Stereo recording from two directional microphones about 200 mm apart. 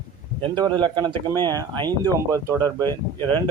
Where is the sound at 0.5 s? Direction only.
20° right (ahead or behind).